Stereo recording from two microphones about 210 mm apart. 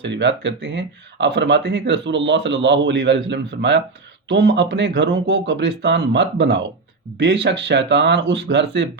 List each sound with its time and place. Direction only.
0.0 s speech: 55° right (ahead or behind)